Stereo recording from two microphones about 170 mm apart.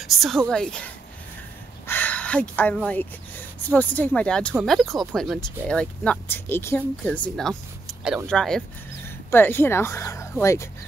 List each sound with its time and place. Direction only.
0.0 s speech: centre (ahead or behind)
7.3 s speech: centre (ahead or behind); by 10.7 s 15° left (ahead or behind)